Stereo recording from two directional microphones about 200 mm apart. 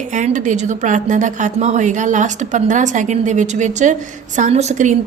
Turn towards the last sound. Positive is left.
turn(degrees=-35)  # may be behind; listen again after turning